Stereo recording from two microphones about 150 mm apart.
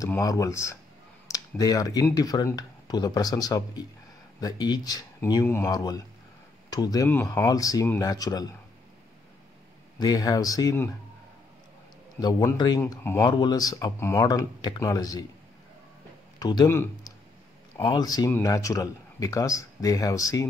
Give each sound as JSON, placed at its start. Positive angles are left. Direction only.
{"t": 0.0, "sound": "speech", "side_deg": 20}
{"t": 9.9, "sound": "speech", "side_deg": 25}
{"t": 12.2, "sound": "speech", "side_deg": 30}
{"t": 16.3, "sound": "speech", "side_deg": 25}
{"t": 17.7, "sound": "speech", "side_deg": 30}